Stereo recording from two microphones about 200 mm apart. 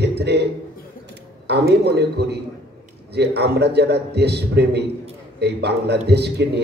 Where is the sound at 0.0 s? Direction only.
55° right (ahead or behind).